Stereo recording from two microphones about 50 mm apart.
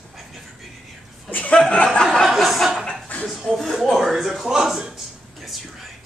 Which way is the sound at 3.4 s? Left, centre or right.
Centre.